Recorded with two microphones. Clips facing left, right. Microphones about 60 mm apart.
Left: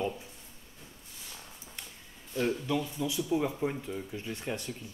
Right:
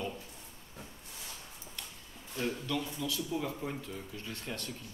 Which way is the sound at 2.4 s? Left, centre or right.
Centre.